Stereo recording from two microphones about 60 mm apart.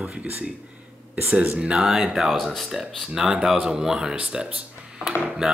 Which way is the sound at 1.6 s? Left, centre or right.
Centre.